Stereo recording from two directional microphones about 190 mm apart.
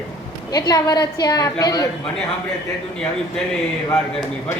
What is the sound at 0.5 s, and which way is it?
A woman's voice, 20° left (ahead or behind).